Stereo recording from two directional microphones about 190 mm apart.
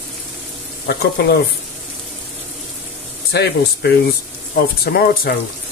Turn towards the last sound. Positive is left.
turn(degrees=55)  # may be behind; listen again after turning